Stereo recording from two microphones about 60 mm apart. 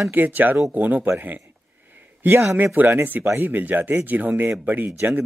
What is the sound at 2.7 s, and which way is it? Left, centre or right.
Speech, right.